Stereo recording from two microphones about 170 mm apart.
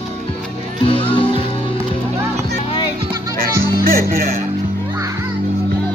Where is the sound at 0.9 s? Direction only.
30° left (ahead or behind).